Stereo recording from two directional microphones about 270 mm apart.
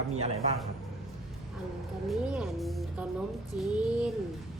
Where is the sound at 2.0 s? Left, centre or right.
Centre.